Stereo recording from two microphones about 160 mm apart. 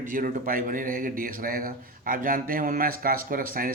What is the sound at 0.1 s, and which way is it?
A man's voice, 60° right (ahead or behind).